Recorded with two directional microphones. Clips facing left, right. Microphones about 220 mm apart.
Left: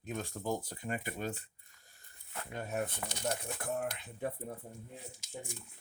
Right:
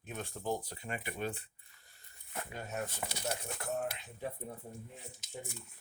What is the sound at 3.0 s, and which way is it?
Speech, 10° right (ahead or behind).